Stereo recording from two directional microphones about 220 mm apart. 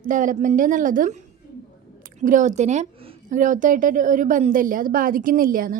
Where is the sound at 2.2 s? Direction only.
35° right (ahead or behind).